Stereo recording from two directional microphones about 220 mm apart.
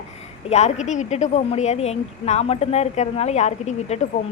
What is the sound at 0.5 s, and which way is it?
A woman's voice, 30° left (ahead or behind).